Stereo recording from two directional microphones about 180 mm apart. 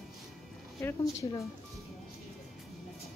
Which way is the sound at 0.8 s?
15° left (ahead or behind).